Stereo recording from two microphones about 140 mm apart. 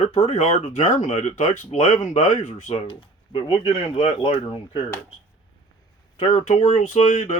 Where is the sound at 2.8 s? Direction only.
40° left (ahead or behind).